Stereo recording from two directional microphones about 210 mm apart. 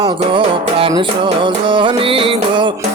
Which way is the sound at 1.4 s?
25° right (ahead or behind).